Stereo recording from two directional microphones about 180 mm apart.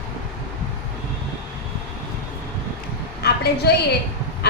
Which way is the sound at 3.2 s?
65° left (ahead or behind).